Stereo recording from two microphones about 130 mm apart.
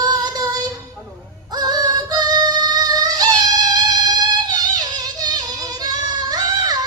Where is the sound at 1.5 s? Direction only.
30° right (ahead or behind).